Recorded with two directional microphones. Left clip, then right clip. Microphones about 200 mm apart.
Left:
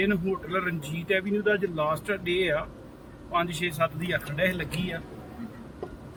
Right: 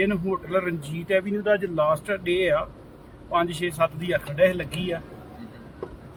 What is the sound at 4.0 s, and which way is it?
Speech, 10° right (ahead or behind).